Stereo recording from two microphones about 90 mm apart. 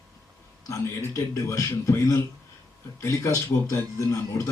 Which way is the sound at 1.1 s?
35° left (ahead or behind).